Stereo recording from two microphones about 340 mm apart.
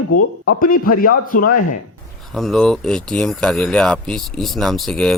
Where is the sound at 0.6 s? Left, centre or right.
Left.